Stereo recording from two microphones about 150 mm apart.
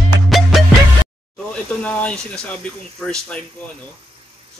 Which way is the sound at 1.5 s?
5° left (ahead or behind).